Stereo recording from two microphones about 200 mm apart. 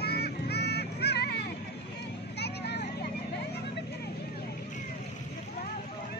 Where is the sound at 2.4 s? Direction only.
55° left (ahead or behind).